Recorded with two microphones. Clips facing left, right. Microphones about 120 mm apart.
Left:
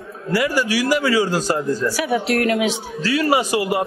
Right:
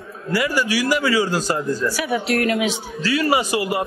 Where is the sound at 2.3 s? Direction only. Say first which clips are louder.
Even; 45° left (ahead or behind).